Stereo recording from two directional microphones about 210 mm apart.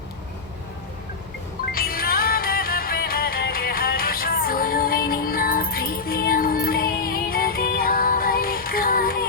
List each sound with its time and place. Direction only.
1.7 s music: 45° left (ahead or behind)